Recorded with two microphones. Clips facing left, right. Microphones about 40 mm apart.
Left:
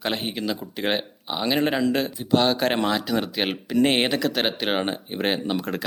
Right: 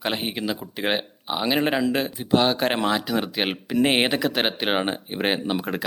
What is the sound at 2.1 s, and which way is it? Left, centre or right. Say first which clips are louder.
Speech: even; right.